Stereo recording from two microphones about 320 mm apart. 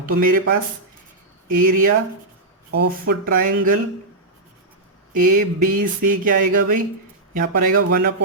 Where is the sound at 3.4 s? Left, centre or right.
Right.